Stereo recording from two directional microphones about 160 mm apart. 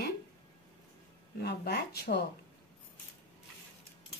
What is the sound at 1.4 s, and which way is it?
Speech, 90° left.